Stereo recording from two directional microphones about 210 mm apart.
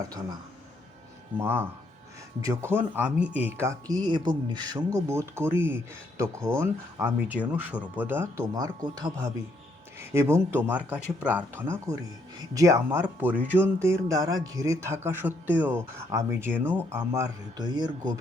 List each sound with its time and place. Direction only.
1.4 s a man's voice: 10° right (ahead or behind)